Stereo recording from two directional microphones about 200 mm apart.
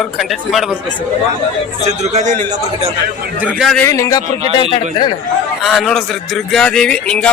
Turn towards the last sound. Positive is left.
turn(degrees=5)  # may be behind; listen again after turning